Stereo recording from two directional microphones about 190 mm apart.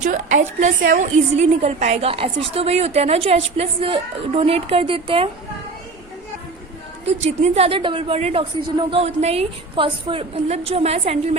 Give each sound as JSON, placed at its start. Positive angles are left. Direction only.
{"t": 0.0, "sound": "a woman's voice", "side_deg": -40}
{"t": 7.0, "sound": "a woman's voice", "side_deg": -35}